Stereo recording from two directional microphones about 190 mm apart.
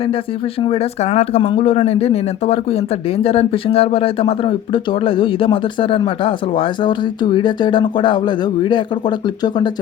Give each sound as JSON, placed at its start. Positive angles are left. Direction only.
{"t": 0.6, "sound": "speech", "side_deg": 35}